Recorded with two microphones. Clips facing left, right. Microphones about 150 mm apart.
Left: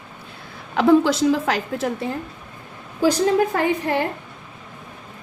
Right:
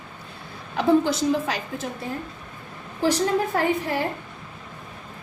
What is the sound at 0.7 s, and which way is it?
A woman's voice, 90° left.